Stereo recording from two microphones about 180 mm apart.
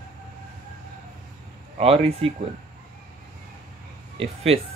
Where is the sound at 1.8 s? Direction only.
35° right (ahead or behind).